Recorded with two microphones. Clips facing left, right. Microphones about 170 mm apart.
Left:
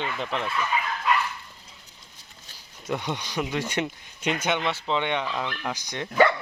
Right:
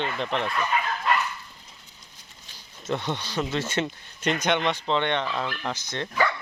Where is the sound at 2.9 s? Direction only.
10° left (ahead or behind).